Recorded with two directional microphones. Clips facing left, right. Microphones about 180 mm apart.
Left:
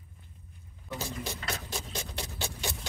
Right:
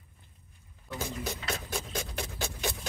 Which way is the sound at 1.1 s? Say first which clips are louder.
Right 4 dB; centre (ahead or behind).